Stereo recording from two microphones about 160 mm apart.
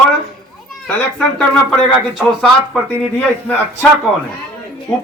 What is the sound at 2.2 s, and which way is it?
Speech, centre (ahead or behind).